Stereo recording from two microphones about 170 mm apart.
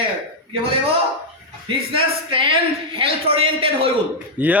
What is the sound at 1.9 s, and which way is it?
A man's voice, 30° right (ahead or behind).